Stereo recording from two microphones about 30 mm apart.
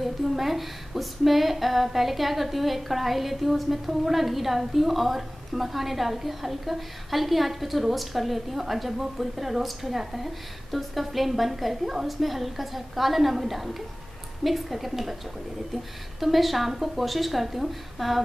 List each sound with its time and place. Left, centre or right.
0.0 s speech: centre
16.2 s speech: centre